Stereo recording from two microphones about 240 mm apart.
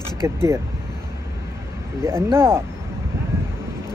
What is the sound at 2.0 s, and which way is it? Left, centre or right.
Speech, centre.